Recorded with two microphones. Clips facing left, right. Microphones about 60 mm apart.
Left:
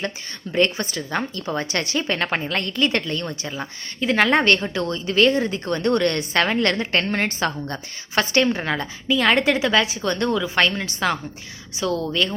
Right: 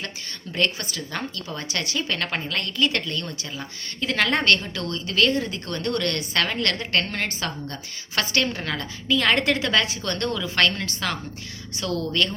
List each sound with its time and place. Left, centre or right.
0.5 s a woman's voice: left
8.1 s a woman's voice: left
11.7 s a woman's voice: centre